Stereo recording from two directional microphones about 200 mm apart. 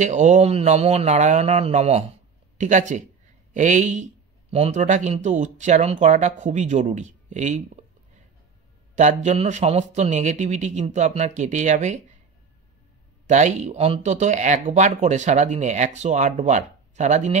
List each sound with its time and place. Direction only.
0.0 s speech: 35° right (ahead or behind)
8.9 s speech: 35° right (ahead or behind)
13.3 s speech: 35° right (ahead or behind)